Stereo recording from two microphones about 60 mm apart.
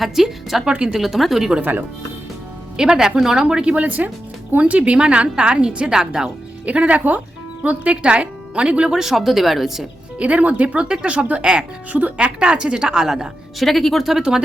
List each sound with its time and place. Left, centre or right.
0.0 s speech: centre
0.6 s speech: centre
0.9 s speech: centre
2.7 s speech: centre
10.2 s speech: right
13.6 s speech: centre